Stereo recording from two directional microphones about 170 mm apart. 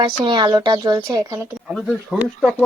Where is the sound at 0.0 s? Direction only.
30° right (ahead or behind).